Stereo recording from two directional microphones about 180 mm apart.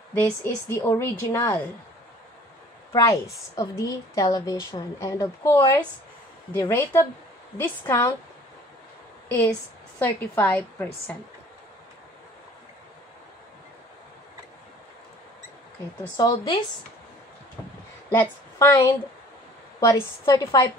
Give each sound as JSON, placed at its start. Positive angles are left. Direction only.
{"t": 0.1, "sound": "a woman's voice", "side_deg": 15}
{"t": 3.0, "sound": "a woman's voice", "side_deg": 20}
{"t": 9.3, "sound": "a woman's voice", "side_deg": 10}
{"t": 16.2, "sound": "a woman's voice", "side_deg": 25}
{"t": 18.1, "sound": "a woman's voice", "side_deg": 15}